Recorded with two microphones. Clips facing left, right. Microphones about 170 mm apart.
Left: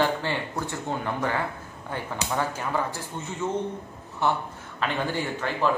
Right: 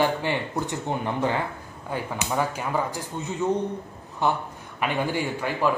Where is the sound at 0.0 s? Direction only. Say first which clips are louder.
Right 2 dB; 15° right (ahead or behind).